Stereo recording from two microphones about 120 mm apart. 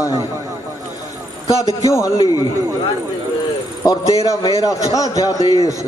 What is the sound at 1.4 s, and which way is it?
A man's voice, 30° left (ahead or behind).